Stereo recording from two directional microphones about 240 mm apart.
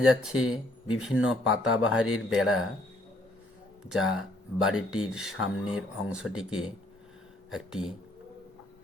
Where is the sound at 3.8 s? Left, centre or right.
Centre.